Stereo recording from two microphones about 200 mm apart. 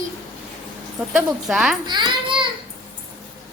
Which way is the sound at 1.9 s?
25° right (ahead or behind).